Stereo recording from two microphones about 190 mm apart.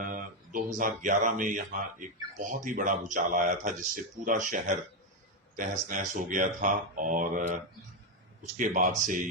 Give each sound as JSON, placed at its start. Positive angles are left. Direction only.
{"t": 0.0, "sound": "speech", "side_deg": -45}